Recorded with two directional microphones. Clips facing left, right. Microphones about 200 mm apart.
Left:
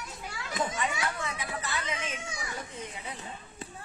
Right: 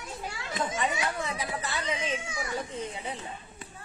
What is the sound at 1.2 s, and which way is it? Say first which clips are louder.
Speech: right 3 dB; 35° right (ahead or behind).